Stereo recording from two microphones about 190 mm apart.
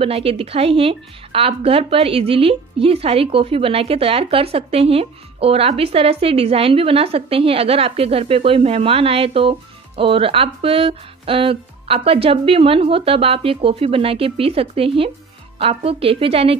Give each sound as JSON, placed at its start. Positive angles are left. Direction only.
{"t": 0.0, "sound": "a woman's voice", "side_deg": -30}